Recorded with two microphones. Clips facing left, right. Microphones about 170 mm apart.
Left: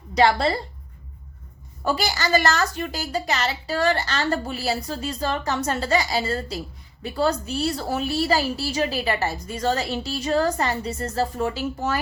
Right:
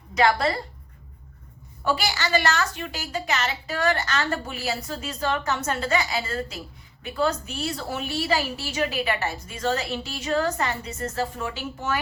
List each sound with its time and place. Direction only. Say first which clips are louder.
0.1 s a woman's voice: left 2 dB; 30° left (ahead or behind)
1.8 s a woman's voice: left 1 dB; 40° left (ahead or behind)